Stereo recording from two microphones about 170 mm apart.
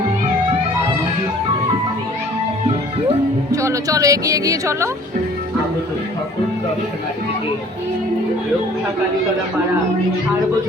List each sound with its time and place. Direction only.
3.5 s speech: 20° right (ahead or behind)